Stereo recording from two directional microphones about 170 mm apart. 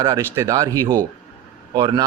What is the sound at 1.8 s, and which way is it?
Speech, 30° right (ahead or behind).